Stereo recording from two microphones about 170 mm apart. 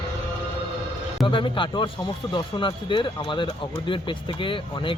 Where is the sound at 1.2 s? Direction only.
30° left (ahead or behind).